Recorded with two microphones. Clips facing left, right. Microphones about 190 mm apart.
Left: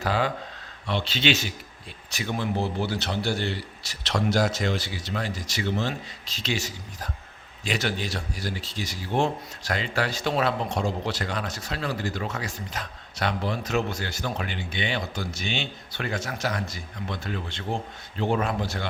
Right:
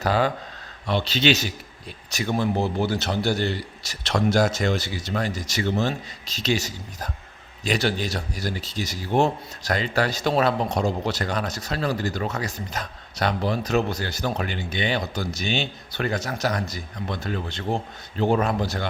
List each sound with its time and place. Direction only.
0.0 s a man's voice: 40° right (ahead or behind)